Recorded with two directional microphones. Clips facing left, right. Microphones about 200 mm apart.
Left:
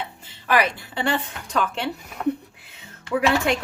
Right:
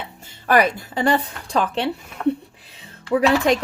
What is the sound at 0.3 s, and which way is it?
A woman's voice, 45° right (ahead or behind).